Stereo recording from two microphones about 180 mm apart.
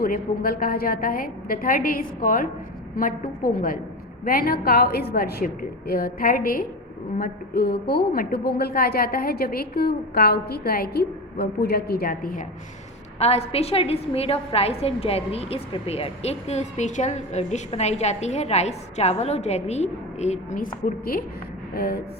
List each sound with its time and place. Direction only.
0.0 s a woman's voice: 55° left (ahead or behind)
13.1 s a woman's voice: 35° left (ahead or behind)
20.8 s a woman's voice: 55° left (ahead or behind)